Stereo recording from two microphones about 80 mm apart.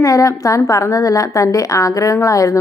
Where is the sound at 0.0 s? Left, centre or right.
Left.